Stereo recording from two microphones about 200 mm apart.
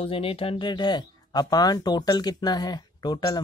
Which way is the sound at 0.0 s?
25° left (ahead or behind).